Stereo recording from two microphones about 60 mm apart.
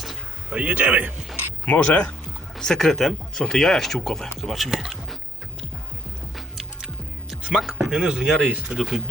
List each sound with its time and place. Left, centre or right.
0.5 s a man's voice: right
1.6 s speech: left
2.6 s speech: centre
6.3 s music: centre
7.5 s speech: centre